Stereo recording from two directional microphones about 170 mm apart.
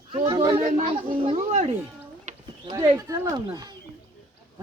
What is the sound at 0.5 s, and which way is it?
Speech, 35° right (ahead or behind).